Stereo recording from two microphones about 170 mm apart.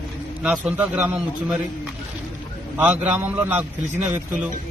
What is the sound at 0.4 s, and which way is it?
A man's voice, 5° right (ahead or behind).